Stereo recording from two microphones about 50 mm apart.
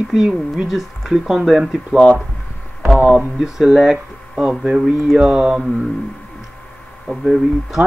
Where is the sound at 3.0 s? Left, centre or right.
Right.